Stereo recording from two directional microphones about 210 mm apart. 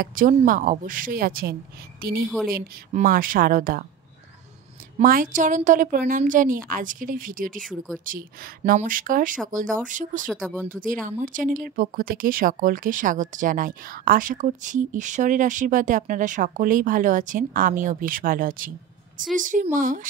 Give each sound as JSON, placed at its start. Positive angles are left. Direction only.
{"t": 0.0, "sound": "a woman's voice", "side_deg": -40}
{"t": 4.9, "sound": "speech", "side_deg": -40}
{"t": 8.6, "sound": "speech", "side_deg": -40}